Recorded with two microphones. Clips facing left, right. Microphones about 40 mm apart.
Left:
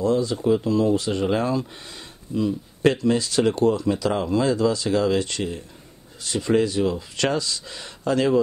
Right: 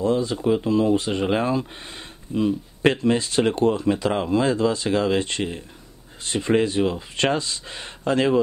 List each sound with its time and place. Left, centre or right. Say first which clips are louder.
0.0 s speech: even; right